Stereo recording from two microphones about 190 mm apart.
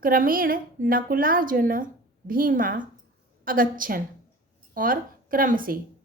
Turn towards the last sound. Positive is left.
turn(degrees=-45)  # may be behind; listen again after turning